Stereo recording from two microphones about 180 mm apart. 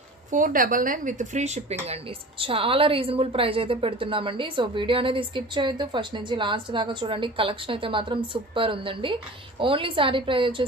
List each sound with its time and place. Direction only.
0.3 s a woman's voice: 50° right (ahead or behind); by 10.5 s 30° right (ahead or behind)